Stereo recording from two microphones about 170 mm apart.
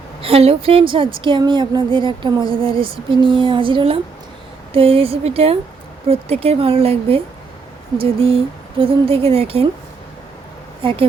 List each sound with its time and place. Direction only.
0.2 s a woman's voice: 35° right (ahead or behind)
10.8 s speech: 30° right (ahead or behind)